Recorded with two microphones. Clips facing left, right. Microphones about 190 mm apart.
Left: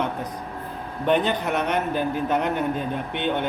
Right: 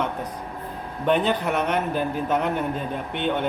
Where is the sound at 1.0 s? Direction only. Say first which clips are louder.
Even; centre (ahead or behind).